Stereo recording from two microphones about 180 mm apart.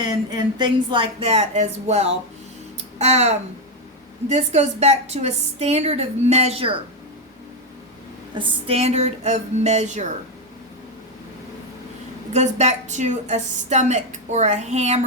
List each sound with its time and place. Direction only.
0.0 s a woman's voice: 25° right (ahead or behind)
8.4 s a woman's voice: 30° right (ahead or behind)
12.3 s a woman's voice: 40° right (ahead or behind)